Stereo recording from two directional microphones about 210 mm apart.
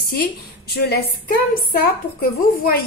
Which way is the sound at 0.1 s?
50° left (ahead or behind).